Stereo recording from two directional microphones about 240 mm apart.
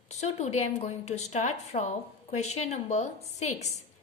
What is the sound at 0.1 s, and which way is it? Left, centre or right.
A woman's voice, left.